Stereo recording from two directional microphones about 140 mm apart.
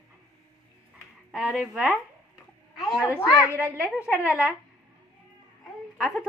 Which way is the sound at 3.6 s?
10° right (ahead or behind).